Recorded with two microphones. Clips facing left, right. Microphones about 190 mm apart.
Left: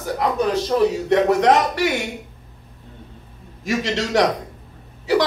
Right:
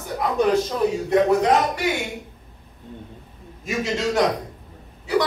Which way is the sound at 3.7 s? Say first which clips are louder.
Left 2 dB; 90° left.